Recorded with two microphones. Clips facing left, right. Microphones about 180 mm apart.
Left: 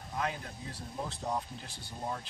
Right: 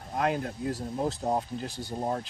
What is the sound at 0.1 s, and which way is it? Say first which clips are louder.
Speech: right 8 dB; 60° right (ahead or behind).